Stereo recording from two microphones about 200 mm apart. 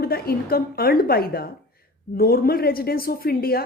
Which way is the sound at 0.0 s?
50° left (ahead or behind).